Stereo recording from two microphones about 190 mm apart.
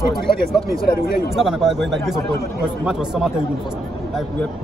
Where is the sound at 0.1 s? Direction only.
Centre (ahead or behind).